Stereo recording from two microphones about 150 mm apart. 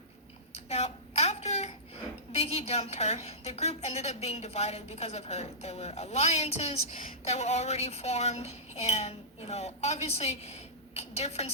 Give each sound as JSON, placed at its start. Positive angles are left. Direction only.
{"t": 0.5, "sound": "a woman's voice", "side_deg": 45}